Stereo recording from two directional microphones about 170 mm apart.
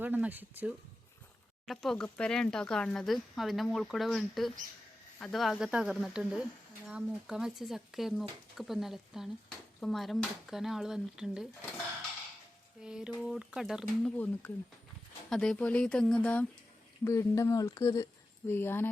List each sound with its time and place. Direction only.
0.0 s speech: 10° right (ahead or behind)
1.6 s speech: centre (ahead or behind)
12.8 s speech: 5° right (ahead or behind)
15.3 s speech: 5° left (ahead or behind)